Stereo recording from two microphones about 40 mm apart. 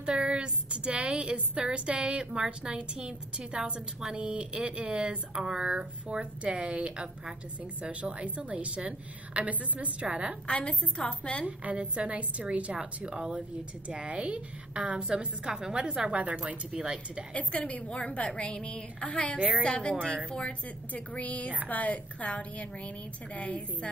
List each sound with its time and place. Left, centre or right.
0.0 s a woman's voice: right
5.3 s a woman's voice: centre; by 10.0 s right
10.0 s a woman's voice: right
10.4 s a woman's voice: left
11.4 s a woman's voice: right
12.7 s a woman's voice: right
17.3 s a woman's voice: left
20.9 s a woman's voice: left